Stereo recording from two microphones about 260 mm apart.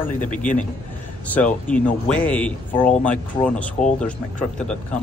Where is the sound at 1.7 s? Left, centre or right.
Centre.